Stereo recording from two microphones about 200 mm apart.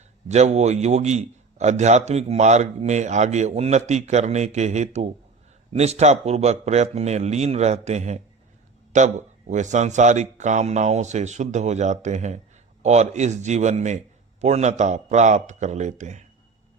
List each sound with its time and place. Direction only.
0.3 s a man's voice: 35° right (ahead or behind)